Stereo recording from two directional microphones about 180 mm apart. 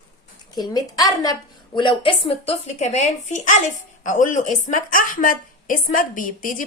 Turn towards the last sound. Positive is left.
turn(degrees=50)  # may be behind; listen again after turning